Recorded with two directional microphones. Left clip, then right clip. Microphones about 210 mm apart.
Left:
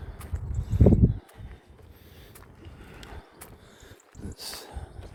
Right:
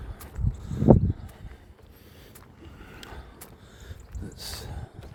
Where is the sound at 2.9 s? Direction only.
25° right (ahead or behind).